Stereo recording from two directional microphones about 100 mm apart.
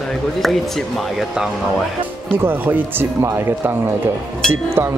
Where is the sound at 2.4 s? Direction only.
20° right (ahead or behind).